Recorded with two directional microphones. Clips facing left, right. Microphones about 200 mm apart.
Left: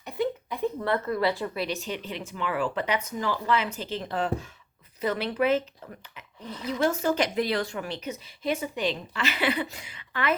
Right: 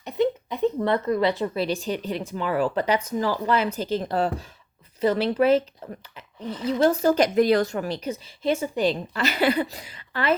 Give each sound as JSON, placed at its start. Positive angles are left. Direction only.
{"t": 0.0, "sound": "a woman's voice", "side_deg": -20}
{"t": 1.6, "sound": "speech", "side_deg": -35}